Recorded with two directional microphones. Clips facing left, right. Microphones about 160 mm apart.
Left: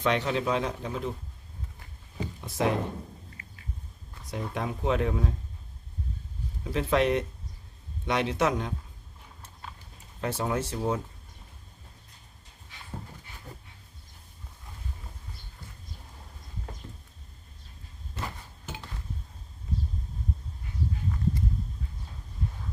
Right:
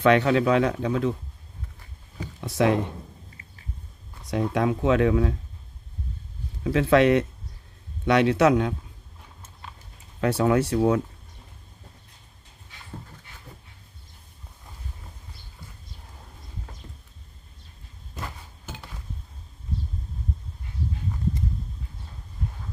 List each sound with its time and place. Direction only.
0.0 s speech: 60° right (ahead or behind); by 1.1 s 85° right
2.4 s speech: 85° right
3.4 s a sound: 30° right (ahead or behind)
4.3 s speech: 85° right
6.7 s speech: 80° right
8.0 s speech: 70° right (ahead or behind)
10.2 s speech: 75° right (ahead or behind)